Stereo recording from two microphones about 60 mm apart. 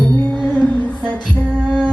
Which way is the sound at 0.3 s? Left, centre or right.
Left.